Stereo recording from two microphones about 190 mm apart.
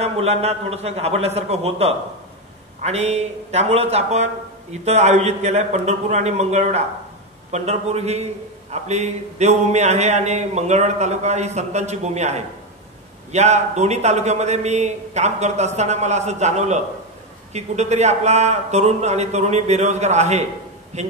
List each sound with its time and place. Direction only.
0.0 s speech: 35° right (ahead or behind)